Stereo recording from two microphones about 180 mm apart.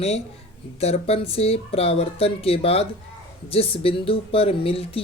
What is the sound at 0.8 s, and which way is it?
Speech, 35° left (ahead or behind).